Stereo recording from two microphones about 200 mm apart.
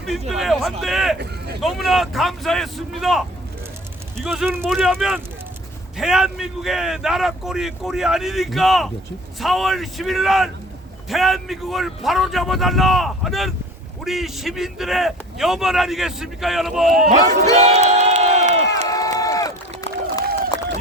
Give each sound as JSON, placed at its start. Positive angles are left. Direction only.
{"t": 0.3, "sound": "a man's voice", "side_deg": 0}
{"t": 17.4, "sound": "crowd", "side_deg": -35}
{"t": 18.9, "sound": "a sound", "side_deg": 15}